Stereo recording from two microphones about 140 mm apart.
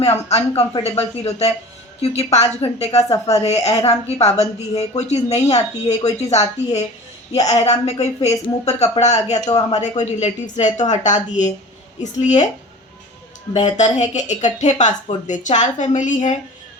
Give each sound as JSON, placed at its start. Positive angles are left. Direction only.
{"t": 0.0, "sound": "speech", "side_deg": 50}
{"t": 13.5, "sound": "speech", "side_deg": 55}